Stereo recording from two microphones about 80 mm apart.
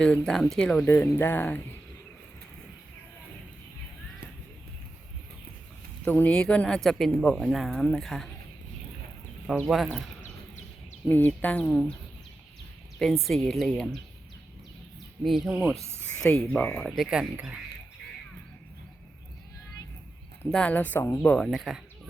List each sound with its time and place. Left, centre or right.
0.0 s speech: centre
0.9 s speech: left
6.1 s speech: left
6.3 s speech: centre
9.6 s speech: centre
11.1 s speech: left
11.7 s speech: centre
13.0 s speech: centre
15.2 s speech: centre
16.1 s speech: centre
16.7 s speech: centre
20.5 s speech: centre
21.0 s speech: left
21.3 s speech: centre